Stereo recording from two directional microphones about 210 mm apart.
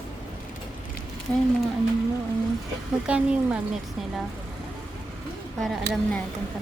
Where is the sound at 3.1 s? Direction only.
5° right (ahead or behind).